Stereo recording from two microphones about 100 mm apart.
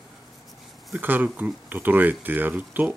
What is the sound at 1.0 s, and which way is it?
Speech, 20° right (ahead or behind).